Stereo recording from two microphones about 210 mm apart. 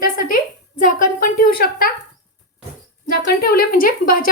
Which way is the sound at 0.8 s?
40° left (ahead or behind).